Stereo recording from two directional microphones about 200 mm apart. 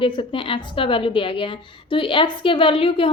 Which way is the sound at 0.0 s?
25° left (ahead or behind).